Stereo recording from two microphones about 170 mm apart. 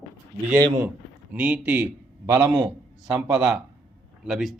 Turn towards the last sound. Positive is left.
turn(degrees=0)  # may be behind; listen again after turning